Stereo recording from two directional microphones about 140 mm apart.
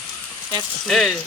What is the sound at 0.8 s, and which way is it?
Speech, centre (ahead or behind).